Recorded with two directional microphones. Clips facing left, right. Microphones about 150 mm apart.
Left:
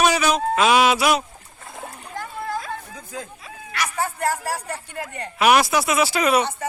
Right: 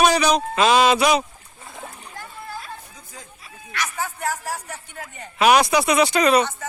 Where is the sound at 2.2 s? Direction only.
70° left (ahead or behind).